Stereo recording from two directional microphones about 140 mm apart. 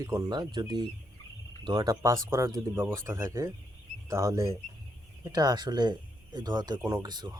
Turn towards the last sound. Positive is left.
turn(degrees=-30)  # may be behind; listen again after turning